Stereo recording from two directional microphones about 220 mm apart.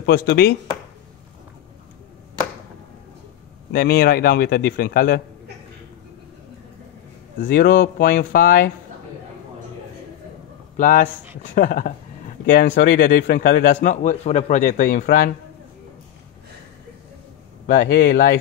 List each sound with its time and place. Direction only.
0.0 s a man's voice: 45° left (ahead or behind)
3.7 s a man's voice: 45° left (ahead or behind)
7.4 s a man's voice: 40° left (ahead or behind)
10.8 s a man's voice: 35° left (ahead or behind)
17.6 s a man's voice: 40° left (ahead or behind)